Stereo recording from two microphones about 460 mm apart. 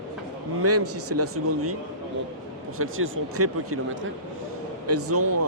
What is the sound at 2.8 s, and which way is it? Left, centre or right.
A man's voice, right.